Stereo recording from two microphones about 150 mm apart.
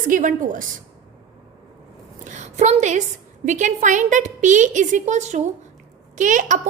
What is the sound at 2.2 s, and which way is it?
A woman's voice, 55° right (ahead or behind).